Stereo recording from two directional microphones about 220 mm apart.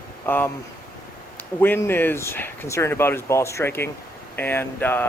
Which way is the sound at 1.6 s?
10° left (ahead or behind).